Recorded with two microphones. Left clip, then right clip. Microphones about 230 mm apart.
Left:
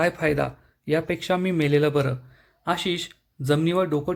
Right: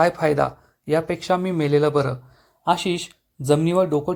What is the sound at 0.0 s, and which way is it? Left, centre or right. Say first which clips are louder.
Speech: right 4 dB; centre.